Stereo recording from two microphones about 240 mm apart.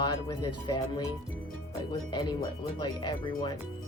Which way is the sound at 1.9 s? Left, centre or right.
Centre.